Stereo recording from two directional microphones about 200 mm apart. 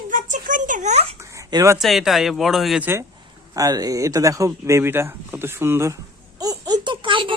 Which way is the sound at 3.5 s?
20° right (ahead or behind).